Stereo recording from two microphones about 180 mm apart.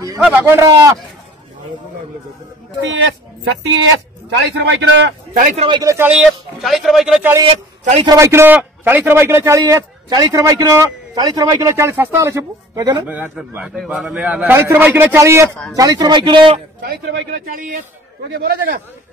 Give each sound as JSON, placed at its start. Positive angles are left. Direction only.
{"t": 0.2, "sound": "a man's voice", "side_deg": -10}
{"t": 2.8, "sound": "speech", "side_deg": -90}
{"t": 4.3, "sound": "a man's voice", "side_deg": -70}
{"t": 5.3, "sound": "speech", "side_deg": -45}
{"t": 5.7, "sound": "speech", "side_deg": -20}
{"t": 7.4, "sound": "a man's voice", "side_deg": -40}
{"t": 8.0, "sound": "a man's voice", "side_deg": -20}
{"t": 13.0, "sound": "a man's voice", "side_deg": -10}
{"t": 16.8, "sound": "speech", "side_deg": -65}
{"t": 18.3, "sound": "a man's voice", "side_deg": -55}